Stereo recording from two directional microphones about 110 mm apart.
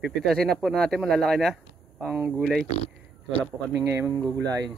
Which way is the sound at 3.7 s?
25° right (ahead or behind).